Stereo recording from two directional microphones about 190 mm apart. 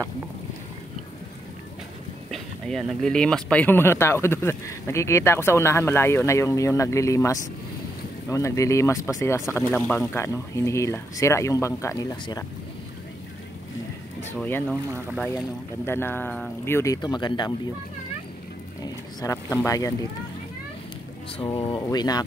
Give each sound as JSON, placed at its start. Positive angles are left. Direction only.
{"t": 2.3, "sound": "speech", "side_deg": 0}
{"t": 14.2, "sound": "speech", "side_deg": 10}
{"t": 14.9, "sound": "speech", "side_deg": -15}
{"t": 15.8, "sound": "speech", "side_deg": 10}
{"t": 19.2, "sound": "speech", "side_deg": 15}
{"t": 21.4, "sound": "speech", "side_deg": 30}